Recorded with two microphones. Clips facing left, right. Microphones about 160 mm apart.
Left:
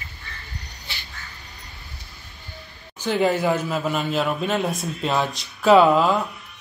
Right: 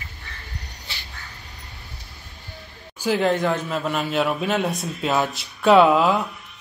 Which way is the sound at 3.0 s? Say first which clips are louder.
Even; centre (ahead or behind).